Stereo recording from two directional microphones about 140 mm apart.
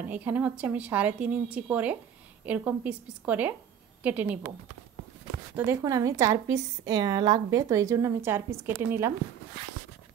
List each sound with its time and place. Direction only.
0.0 s a woman's voice: 10° right (ahead or behind)
5.7 s a woman's voice: 25° right (ahead or behind)